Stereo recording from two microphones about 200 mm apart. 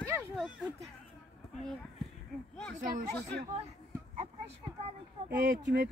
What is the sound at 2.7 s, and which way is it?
Speech, 40° right (ahead or behind).